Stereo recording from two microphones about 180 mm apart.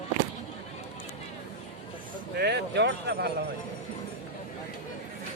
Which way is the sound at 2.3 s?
70° right (ahead or behind).